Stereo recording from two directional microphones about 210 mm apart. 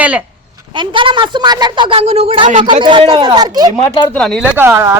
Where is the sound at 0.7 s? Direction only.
25° right (ahead or behind).